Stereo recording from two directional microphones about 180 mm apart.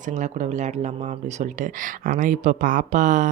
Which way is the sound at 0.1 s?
40° right (ahead or behind).